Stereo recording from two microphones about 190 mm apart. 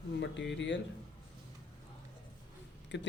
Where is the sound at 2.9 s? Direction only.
70° left (ahead or behind).